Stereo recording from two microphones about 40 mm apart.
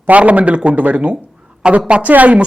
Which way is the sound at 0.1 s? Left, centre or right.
Right.